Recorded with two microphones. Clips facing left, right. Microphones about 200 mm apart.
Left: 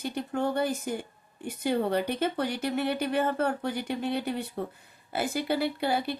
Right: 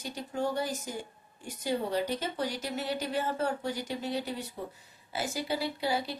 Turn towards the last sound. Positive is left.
turn(degrees=60)  # may be behind; listen again after turning